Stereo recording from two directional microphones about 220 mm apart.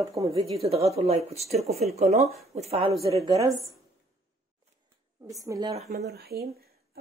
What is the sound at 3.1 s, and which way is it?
Speech, 15° right (ahead or behind).